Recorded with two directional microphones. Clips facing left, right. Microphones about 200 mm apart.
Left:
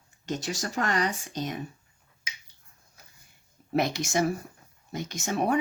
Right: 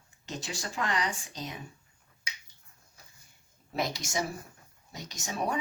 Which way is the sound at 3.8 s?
55° left (ahead or behind).